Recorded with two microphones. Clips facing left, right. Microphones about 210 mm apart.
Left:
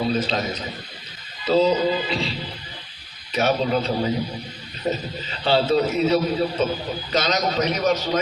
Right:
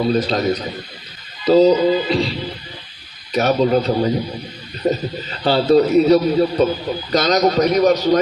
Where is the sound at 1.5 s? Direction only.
40° right (ahead or behind).